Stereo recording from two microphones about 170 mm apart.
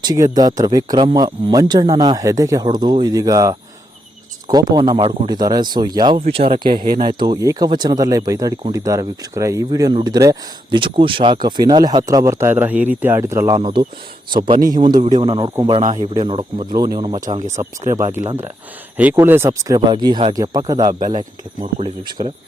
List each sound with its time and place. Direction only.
0.0 s speech: 20° right (ahead or behind)
7.2 s speech: 20° right (ahead or behind)
13.6 s speech: 30° right (ahead or behind)
17.4 s speech: 45° right (ahead or behind)
17.9 s speech: 20° right (ahead or behind)
21.6 s speech: 40° right (ahead or behind)